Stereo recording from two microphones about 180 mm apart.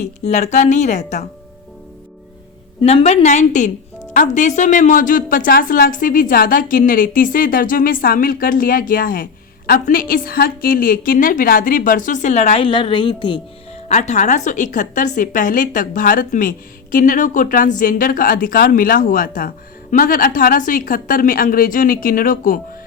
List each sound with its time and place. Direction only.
0.0 s a woman's voice: 40° left (ahead or behind)
2.8 s a woman's voice: 35° left (ahead or behind)
13.8 s a woman's voice: 40° left (ahead or behind)